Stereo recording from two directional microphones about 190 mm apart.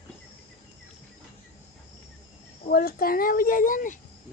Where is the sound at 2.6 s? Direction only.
50° left (ahead or behind).